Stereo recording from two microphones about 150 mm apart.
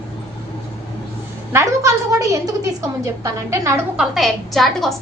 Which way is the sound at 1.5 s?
20° right (ahead or behind).